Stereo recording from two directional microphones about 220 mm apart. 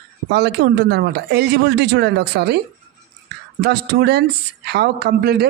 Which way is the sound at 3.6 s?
50° right (ahead or behind).